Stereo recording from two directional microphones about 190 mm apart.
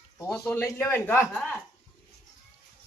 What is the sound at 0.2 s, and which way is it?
A man's voice, 15° left (ahead or behind).